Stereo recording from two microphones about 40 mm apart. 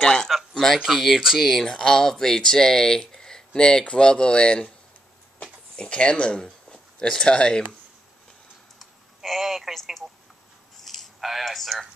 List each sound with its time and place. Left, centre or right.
0.0 s speech: centre
0.8 s speech: centre; by 4.7 s left
5.8 s speech: left
8.7 s typing: centre
10.8 s a sound: centre